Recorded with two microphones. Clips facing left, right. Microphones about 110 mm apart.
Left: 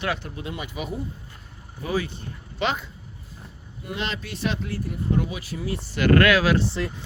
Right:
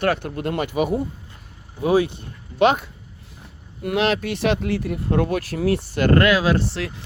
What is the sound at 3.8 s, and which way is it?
Speech, 70° right (ahead or behind).